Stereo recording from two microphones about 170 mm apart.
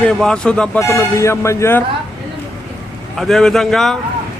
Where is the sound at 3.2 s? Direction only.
Centre (ahead or behind).